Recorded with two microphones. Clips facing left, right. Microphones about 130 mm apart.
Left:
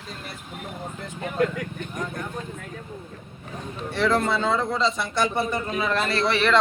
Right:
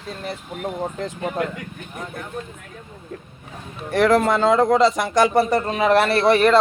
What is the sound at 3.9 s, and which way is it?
A man's voice, 80° right.